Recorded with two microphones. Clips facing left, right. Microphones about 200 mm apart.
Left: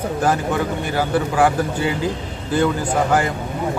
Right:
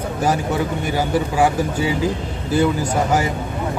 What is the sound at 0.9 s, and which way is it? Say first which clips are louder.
Speech: left 1 dB; 10° right (ahead or behind).